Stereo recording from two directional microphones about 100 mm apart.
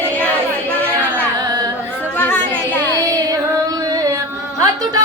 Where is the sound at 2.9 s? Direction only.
35° right (ahead or behind).